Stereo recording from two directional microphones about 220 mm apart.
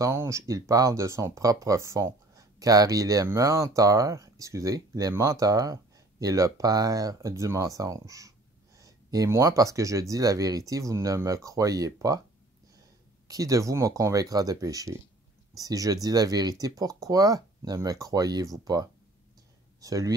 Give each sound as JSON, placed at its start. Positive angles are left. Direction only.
{"t": 0.0, "sound": "speech", "side_deg": -10}
{"t": 13.3, "sound": "speech", "side_deg": -15}